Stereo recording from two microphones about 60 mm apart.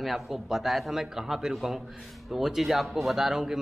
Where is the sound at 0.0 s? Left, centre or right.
Centre.